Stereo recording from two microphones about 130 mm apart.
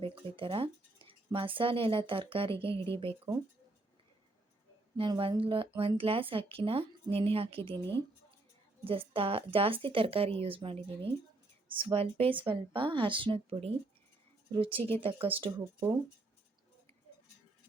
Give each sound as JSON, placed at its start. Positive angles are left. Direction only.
{"t": 0.0, "sound": "speech", "side_deg": -45}
{"t": 4.9, "sound": "speech", "side_deg": -40}
{"t": 8.8, "sound": "speech", "side_deg": -45}